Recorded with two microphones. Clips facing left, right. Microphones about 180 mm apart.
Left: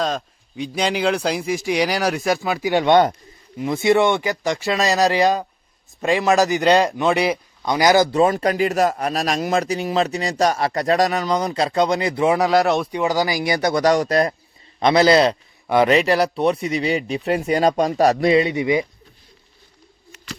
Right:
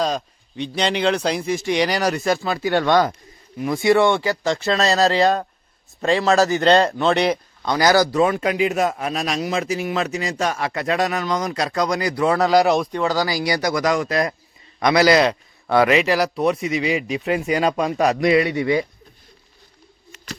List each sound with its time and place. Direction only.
0.0 s speech: centre (ahead or behind); by 8.0 s 15° left (ahead or behind)
8.1 s speech: 35° left (ahead or behind)
8.5 s speech: centre (ahead or behind)
9.2 s a man's voice: 45° left (ahead or behind)
9.6 s speech: 35° left (ahead or behind)
12.4 s speech: centre (ahead or behind)
12.9 s speech: 15° left (ahead or behind)
15.6 s speech: 20° left (ahead or behind)
15.9 s speech: 35° left (ahead or behind); by 18.9 s 20° left (ahead or behind)